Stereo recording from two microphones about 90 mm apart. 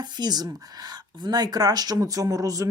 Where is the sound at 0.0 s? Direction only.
50° right (ahead or behind).